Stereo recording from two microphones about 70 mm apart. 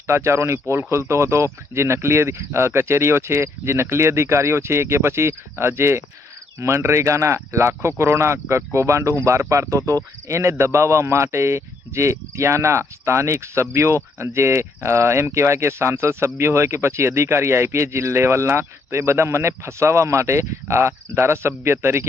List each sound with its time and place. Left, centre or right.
0.1 s speech: right